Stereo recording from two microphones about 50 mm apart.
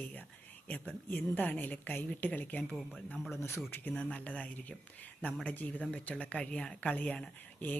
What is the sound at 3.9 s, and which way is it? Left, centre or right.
Speech, left.